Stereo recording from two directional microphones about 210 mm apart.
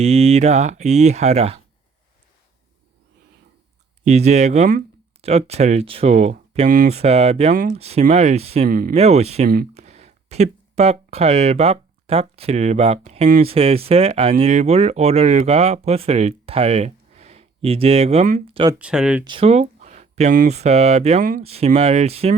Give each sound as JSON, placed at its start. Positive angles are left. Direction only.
{"t": 0.0, "sound": "speech", "side_deg": -30}
{"t": 4.0, "sound": "speech", "side_deg": -35}
{"t": 8.6, "sound": "speech", "side_deg": -45}
{"t": 9.0, "sound": "speech", "side_deg": -30}
{"t": 18.8, "sound": "speech", "side_deg": -5}
{"t": 19.2, "sound": "speech", "side_deg": -25}